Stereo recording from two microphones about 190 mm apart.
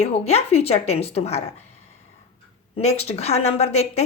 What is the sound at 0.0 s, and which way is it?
A woman's voice, 35° left (ahead or behind).